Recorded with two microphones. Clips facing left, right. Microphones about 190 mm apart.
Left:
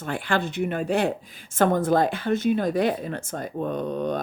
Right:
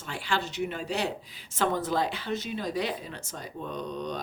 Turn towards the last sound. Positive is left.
turn(degrees=55)  # may be behind; listen again after turning